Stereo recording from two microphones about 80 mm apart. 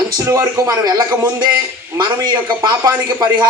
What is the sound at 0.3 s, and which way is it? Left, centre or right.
A man's voice, right.